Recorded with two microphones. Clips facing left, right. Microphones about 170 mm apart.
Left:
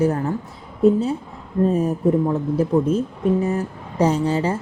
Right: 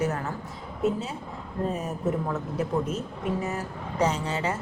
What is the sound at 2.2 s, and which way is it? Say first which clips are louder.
Speech: left 9 dB; 30° left (ahead or behind).